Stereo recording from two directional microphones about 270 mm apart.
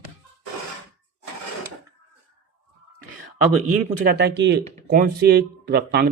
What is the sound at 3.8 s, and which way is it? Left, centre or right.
Speech, right.